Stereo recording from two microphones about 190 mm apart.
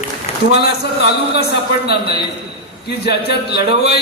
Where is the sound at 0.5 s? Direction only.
60° left (ahead or behind).